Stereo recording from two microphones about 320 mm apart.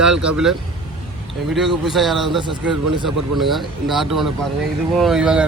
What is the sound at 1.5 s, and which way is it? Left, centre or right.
Speech, centre.